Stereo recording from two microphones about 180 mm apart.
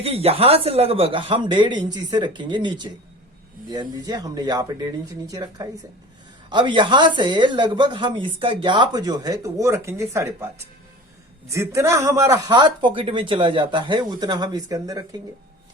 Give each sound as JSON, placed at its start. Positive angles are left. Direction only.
{"t": 0.0, "sound": "a woman's voice", "side_deg": -35}